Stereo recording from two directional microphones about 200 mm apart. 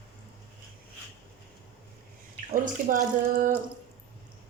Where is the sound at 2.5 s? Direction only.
40° right (ahead or behind).